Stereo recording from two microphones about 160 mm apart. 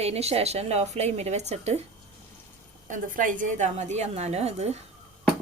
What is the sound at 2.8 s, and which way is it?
A woman's voice, 55° right (ahead or behind).